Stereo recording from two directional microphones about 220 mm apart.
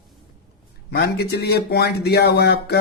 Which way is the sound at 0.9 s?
50° left (ahead or behind).